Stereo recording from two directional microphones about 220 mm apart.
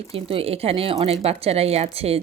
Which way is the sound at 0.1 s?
25° right (ahead or behind).